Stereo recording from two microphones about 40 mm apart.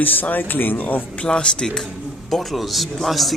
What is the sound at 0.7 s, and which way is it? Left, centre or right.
Speech, left.